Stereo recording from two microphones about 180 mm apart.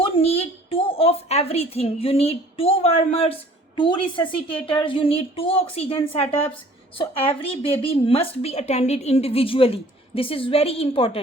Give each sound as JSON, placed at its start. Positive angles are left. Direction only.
{"t": 0.0, "sound": "a woman's voice", "side_deg": 35}